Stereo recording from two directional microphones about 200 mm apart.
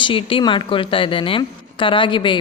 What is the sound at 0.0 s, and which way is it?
A woman's voice, 25° left (ahead or behind).